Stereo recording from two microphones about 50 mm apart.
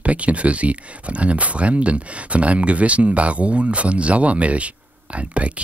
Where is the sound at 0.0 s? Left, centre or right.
Right.